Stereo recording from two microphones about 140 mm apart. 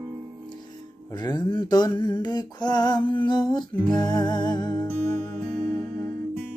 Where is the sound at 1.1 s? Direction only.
30° left (ahead or behind).